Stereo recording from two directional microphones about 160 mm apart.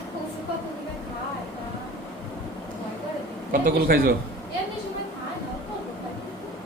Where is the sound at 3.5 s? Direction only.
65° right (ahead or behind).